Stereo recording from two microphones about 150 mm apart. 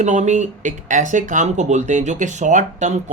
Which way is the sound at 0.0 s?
55° right (ahead or behind).